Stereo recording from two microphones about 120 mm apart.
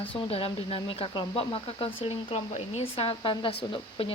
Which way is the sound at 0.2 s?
50° left (ahead or behind).